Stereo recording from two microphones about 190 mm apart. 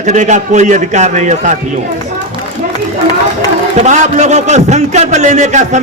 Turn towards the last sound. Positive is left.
turn(degrees=-40)  # may be behind; listen again after turning